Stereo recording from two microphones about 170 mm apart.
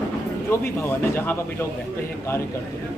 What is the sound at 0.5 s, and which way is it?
Speech, 15° left (ahead or behind).